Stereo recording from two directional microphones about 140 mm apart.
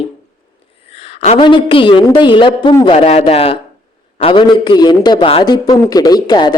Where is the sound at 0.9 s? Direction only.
45° left (ahead or behind).